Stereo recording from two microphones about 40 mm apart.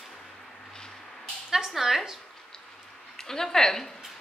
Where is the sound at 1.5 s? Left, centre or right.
Centre.